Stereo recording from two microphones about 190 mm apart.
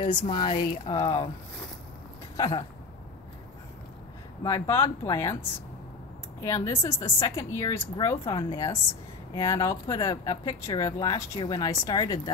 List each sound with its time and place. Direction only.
0.0 s speech: 25° left (ahead or behind)
2.3 s speech: 20° left (ahead or behind)
4.4 s a woman's voice: 15° left (ahead or behind)
6.4 s a woman's voice: 15° left (ahead or behind)